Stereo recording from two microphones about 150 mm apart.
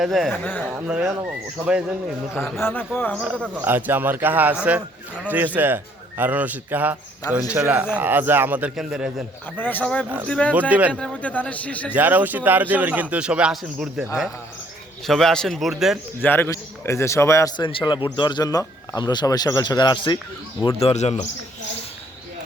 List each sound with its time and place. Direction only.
0.0 s a man's voice: centre (ahead or behind)
2.3 s a man's voice: 15° left (ahead or behind)
3.4 s speech: 10° right (ahead or behind)
9.6 s a man's voice: 10° left (ahead or behind)
10.5 s speech: 10° right (ahead or behind)
10.9 s a man's voice: 5° left (ahead or behind)
11.9 s a man's voice: 10° right (ahead or behind)
16.2 s speech: 15° left (ahead or behind)
17.6 s speech: 35° left (ahead or behind)
20.7 s a man's voice: 45° left (ahead or behind)